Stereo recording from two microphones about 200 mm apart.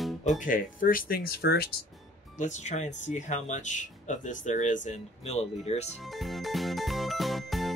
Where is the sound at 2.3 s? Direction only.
35° left (ahead or behind).